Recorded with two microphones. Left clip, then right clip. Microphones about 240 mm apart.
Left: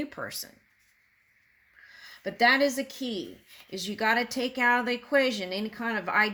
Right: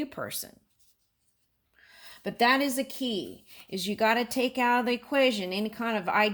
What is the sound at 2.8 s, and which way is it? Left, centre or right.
Speech, right.